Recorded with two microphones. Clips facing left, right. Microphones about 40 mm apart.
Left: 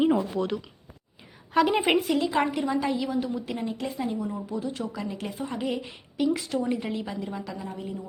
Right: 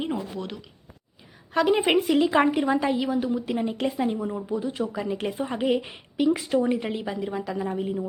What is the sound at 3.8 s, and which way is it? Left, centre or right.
A woman's voice, right.